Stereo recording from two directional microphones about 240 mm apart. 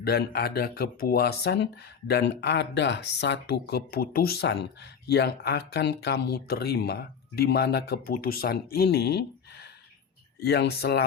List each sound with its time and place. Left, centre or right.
0.0 s speech: left